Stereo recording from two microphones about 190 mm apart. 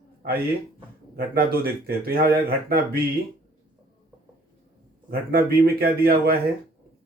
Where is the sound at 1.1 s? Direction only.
55° right (ahead or behind).